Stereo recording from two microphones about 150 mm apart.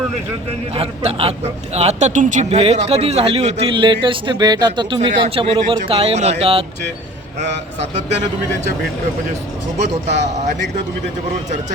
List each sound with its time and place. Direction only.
0.7 s a man's voice: 40° right (ahead or behind)
9.9 s a man's voice: 50° right (ahead or behind)